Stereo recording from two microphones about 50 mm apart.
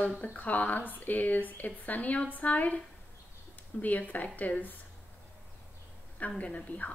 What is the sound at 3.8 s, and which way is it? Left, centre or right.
Speech, left.